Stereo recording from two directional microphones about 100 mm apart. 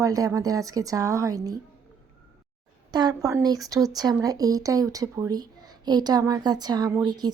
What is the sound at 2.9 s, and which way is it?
A woman's voice, 45° right (ahead or behind).